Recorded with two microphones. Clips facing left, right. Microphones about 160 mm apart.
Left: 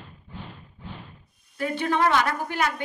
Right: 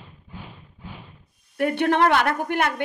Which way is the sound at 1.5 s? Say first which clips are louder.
Right 5 dB; 60° right (ahead or behind).